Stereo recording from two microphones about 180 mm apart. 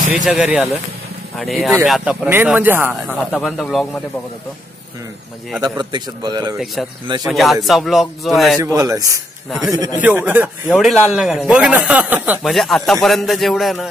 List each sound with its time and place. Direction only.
0.1 s a man's voice: centre (ahead or behind)
3.2 s a man's voice: centre (ahead or behind)
5.6 s a man's voice: 25° right (ahead or behind)
6.6 s a man's voice: centre (ahead or behind)
8.5 s a man's voice: 20° right (ahead or behind)
10.0 s a man's voice: 10° right (ahead or behind)